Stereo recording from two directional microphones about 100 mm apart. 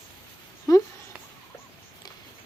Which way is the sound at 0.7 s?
35° left (ahead or behind).